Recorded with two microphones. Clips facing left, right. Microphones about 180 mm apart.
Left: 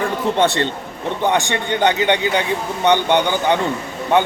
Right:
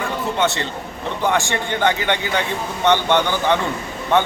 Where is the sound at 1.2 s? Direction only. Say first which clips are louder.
Left 1 dB; 20° left (ahead or behind).